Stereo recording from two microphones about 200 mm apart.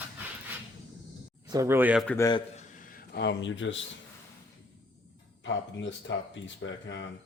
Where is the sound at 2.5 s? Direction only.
40° left (ahead or behind); by 3.8 s 70° left (ahead or behind).